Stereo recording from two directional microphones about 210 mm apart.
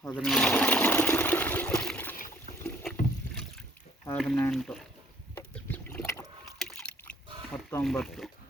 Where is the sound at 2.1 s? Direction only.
40° left (ahead or behind).